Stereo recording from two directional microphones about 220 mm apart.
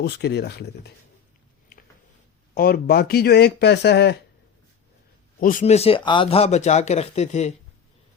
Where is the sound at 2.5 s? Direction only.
45° left (ahead or behind).